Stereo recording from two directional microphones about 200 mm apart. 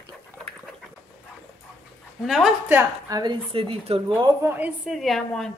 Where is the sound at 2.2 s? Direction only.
Centre (ahead or behind); by 3.3 s 20° right (ahead or behind).